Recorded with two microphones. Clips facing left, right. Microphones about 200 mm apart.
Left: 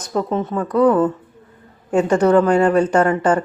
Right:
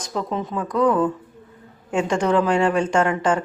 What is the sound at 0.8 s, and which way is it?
A woman's voice, 40° left (ahead or behind).